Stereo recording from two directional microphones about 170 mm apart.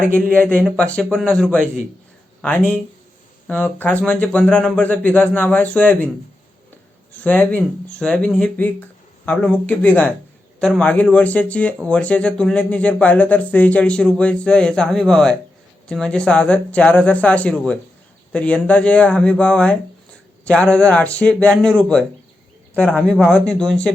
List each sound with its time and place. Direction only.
0.2 s a man's voice: 5° left (ahead or behind)
7.1 s a man's voice: 10° left (ahead or behind)